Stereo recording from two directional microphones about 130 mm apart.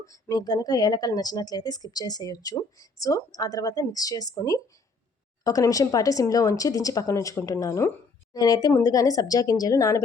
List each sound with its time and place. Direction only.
0.0 s speech: 25° left (ahead or behind)